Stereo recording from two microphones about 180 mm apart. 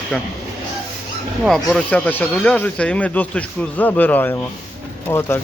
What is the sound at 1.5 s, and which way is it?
A man's voice, centre (ahead or behind).